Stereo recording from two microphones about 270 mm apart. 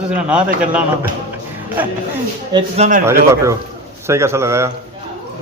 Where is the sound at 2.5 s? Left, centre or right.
Centre.